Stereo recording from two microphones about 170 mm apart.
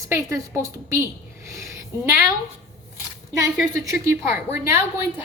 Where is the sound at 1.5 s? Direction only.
15° right (ahead or behind).